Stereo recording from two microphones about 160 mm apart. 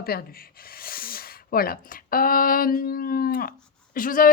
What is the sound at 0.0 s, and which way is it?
Speech, 75° left (ahead or behind).